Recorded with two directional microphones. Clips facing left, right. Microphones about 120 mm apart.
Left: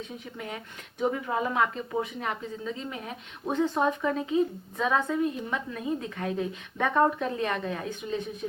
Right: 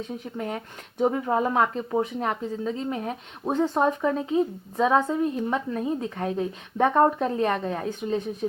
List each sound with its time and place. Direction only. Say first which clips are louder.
0.0 s speech: right 7 dB; 40° right (ahead or behind)